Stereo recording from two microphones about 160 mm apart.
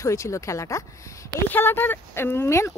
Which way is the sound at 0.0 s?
20° left (ahead or behind).